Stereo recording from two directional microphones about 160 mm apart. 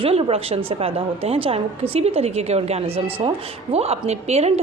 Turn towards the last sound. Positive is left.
turn(degrees=-40)  # may be behind; listen again after turning